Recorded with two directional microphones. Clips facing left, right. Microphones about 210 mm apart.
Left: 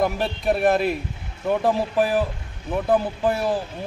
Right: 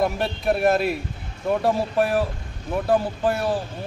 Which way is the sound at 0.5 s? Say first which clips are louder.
Even; centre (ahead or behind).